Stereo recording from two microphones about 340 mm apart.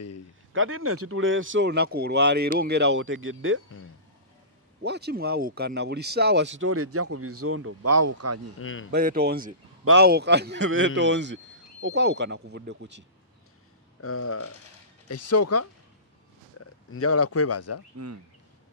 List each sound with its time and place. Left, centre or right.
0.5 s speech: right
4.8 s speech: right
8.5 s speech: left
8.9 s speech: right
14.0 s speech: left
17.9 s speech: right